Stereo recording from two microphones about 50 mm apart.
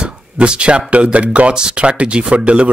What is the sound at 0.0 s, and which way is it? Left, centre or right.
Speech, right.